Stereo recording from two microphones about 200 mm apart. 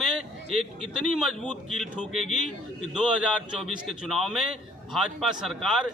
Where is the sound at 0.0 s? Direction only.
Centre (ahead or behind).